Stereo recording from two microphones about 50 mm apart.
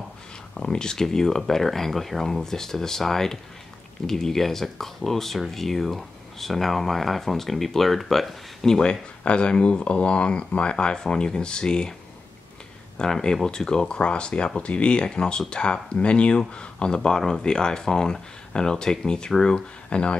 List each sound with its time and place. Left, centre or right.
0.6 s speech: centre
9.2 s speech: left
12.9 s speech: centre